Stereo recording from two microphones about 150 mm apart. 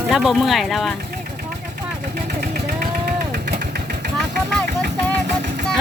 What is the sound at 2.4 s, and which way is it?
Vehicle, 80° right.